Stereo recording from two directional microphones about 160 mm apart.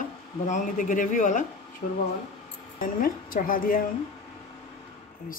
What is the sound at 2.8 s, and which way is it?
Speech, 60° left (ahead or behind).